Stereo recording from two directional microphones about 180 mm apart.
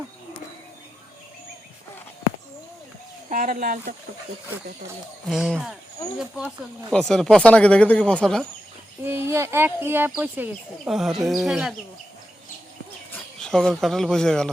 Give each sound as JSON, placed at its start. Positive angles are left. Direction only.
{"t": 3.2, "sound": "speech", "side_deg": -45}
{"t": 5.3, "sound": "speech", "side_deg": -5}
{"t": 9.0, "sound": "speech", "side_deg": -15}
{"t": 13.4, "sound": "speech", "side_deg": 5}